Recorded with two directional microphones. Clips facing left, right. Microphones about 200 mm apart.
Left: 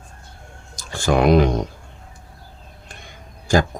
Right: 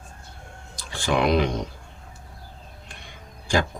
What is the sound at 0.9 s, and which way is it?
Speech, 45° left (ahead or behind).